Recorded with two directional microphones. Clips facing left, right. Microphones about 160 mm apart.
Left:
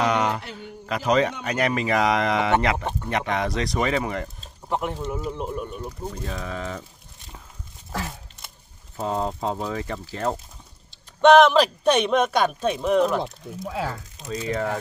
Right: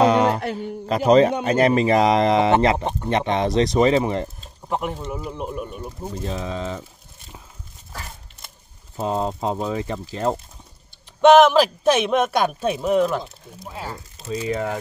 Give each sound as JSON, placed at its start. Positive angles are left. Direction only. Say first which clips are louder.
{"t": 0.0, "sound": "a sound", "louder": "right 6 dB", "side_deg": -30}
{"t": 0.6, "sound": "a man's voice", "louder": "right 7 dB", "side_deg": -35}
{"t": 4.6, "sound": "speech", "louder": "right 1 dB", "side_deg": 0}
{"t": 6.1, "sound": "speech", "louder": "right 4 dB", "side_deg": -25}
{"t": 8.9, "sound": "speech", "louder": "right 2 dB", "side_deg": -20}
{"t": 11.1, "sound": "speech", "louder": "right 2 dB", "side_deg": -5}
{"t": 13.2, "sound": "speech", "louder": "left 7 dB", "side_deg": 90}
{"t": 14.2, "sound": "speech", "louder": "right 2 dB", "side_deg": -5}